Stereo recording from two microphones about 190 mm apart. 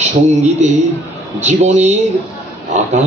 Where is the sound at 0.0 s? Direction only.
40° right (ahead or behind).